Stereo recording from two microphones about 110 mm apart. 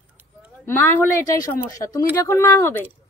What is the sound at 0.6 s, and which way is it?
Speech, 20° left (ahead or behind).